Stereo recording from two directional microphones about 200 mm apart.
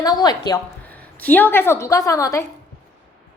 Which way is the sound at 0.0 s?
20° left (ahead or behind).